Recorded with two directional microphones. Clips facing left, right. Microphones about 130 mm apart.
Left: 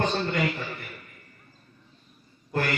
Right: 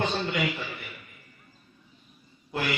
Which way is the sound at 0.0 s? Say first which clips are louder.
Left 2 dB; 45° left (ahead or behind).